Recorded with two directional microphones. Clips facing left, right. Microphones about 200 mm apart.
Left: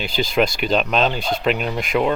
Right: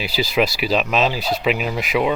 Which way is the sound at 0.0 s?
5° right (ahead or behind).